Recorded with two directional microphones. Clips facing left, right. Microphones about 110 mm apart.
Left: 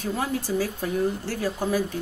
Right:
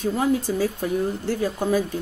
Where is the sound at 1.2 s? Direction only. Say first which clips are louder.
Right 3 dB; 20° right (ahead or behind).